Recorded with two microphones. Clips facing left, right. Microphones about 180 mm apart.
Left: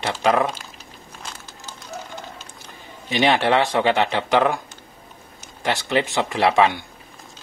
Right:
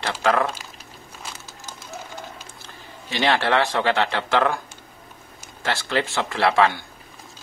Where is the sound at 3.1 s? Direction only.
15° left (ahead or behind).